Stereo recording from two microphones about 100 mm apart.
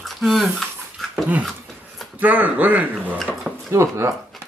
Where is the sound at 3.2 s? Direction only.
Centre (ahead or behind).